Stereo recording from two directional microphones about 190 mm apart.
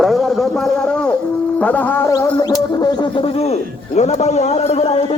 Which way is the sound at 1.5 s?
5° left (ahead or behind).